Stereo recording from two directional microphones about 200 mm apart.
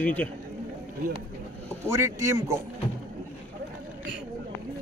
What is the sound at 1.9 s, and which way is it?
Speech, 15° right (ahead or behind).